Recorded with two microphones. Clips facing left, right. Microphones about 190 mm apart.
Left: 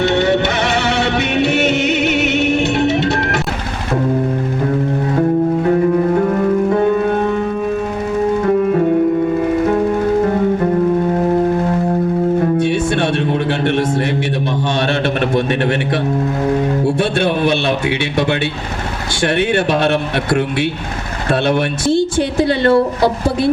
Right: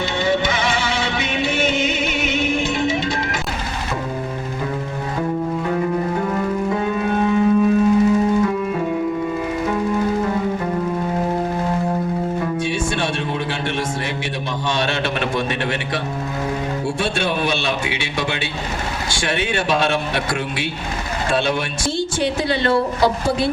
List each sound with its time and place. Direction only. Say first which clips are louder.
0.0 s music: left 6 dB; 65° left (ahead or behind)
6.2 s music: left 7 dB; 50° left (ahead or behind)
8.4 s music: left 8 dB; 50° left (ahead or behind)
12.4 s music: left 7 dB; 60° left (ahead or behind)
16.8 s music: left 6 dB; 55° left (ahead or behind)
19.2 s a woman's voice: left 8 dB; 60° left (ahead or behind)
21.9 s a woman's voice: left 5 dB; 55° left (ahead or behind)